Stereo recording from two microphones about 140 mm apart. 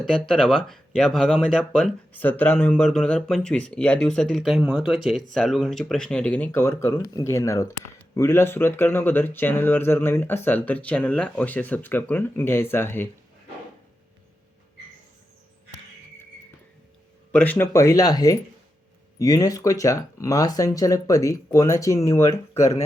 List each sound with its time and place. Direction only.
0.0 s speech: 5° left (ahead or behind)
17.3 s speech: 10° left (ahead or behind)